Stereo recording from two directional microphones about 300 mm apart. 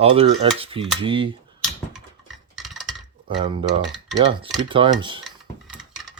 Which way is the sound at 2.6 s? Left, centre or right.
Centre.